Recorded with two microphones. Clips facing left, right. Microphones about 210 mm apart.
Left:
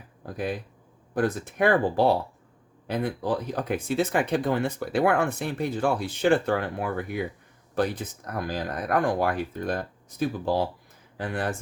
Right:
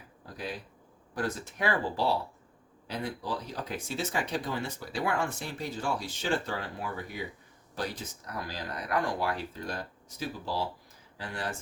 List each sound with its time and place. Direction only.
1.1 s speech: 55° left (ahead or behind)